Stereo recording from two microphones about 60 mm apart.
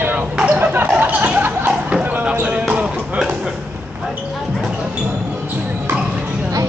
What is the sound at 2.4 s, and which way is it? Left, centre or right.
Music, centre.